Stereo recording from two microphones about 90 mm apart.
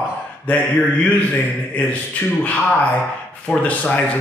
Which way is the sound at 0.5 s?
15° left (ahead or behind).